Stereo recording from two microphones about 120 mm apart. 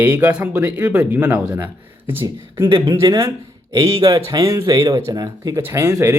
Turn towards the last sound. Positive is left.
turn(degrees=-30)  # may be behind; listen again after turning